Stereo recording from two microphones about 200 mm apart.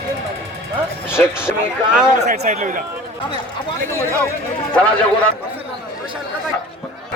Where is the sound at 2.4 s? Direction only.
35° right (ahead or behind).